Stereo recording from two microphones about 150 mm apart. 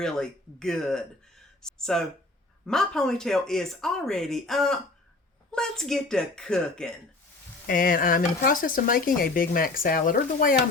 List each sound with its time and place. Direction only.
0.0 s speech: 5° left (ahead or behind)
7.7 s speech: 65° left (ahead or behind)